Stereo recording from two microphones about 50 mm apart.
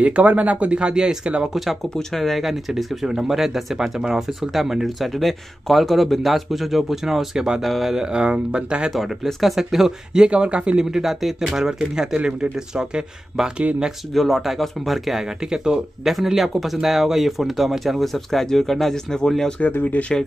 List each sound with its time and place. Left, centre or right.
0.0 s speech: right
2.0 s speech: centre
7.6 s speech: centre
7.9 s speech: centre
8.9 s speech: centre
12.2 s speech: right
14.1 s speech: centre
15.5 s speech: centre
16.1 s speech: centre
19.9 s speech: left